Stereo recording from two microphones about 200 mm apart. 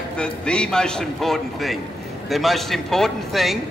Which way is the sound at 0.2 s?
5° left (ahead or behind).